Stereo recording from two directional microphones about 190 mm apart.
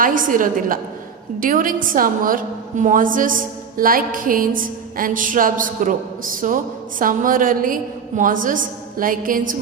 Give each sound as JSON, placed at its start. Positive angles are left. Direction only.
{"t": 0.0, "sound": "a woman's voice", "side_deg": -45}